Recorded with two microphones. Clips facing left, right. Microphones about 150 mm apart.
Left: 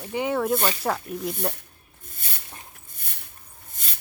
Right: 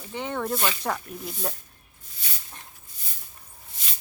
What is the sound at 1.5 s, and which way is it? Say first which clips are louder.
Snake: left 3 dB; 55° left (ahead or behind).